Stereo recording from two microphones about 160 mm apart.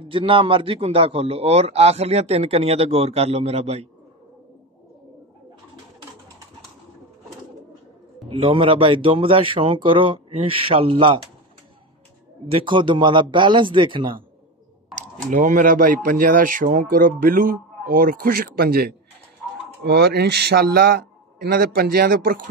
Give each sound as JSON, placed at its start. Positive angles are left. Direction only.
{"t": 0.1, "sound": "a man's voice", "side_deg": -30}
{"t": 8.3, "sound": "a man's voice", "side_deg": -35}
{"t": 12.4, "sound": "a man's voice", "side_deg": -35}
{"t": 15.2, "sound": "a man's voice", "side_deg": -55}
{"t": 19.8, "sound": "a man's voice", "side_deg": -90}